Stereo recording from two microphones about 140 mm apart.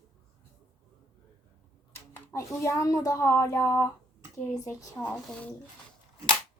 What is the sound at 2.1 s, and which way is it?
Speech, 20° left (ahead or behind).